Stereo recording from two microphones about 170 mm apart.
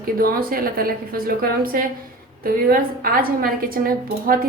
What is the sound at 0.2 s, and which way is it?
A woman's voice, 60° right (ahead or behind).